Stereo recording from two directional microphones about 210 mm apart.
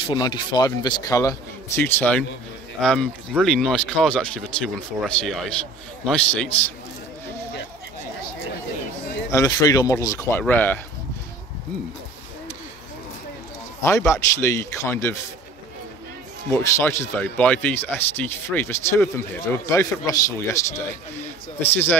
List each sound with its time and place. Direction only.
0.0 s speech: 20° left (ahead or behind); by 6.5 s 5° left (ahead or behind)
9.3 s speech: 15° left (ahead or behind)
13.8 s speech: 15° left (ahead or behind)
16.4 s speech: 10° left (ahead or behind)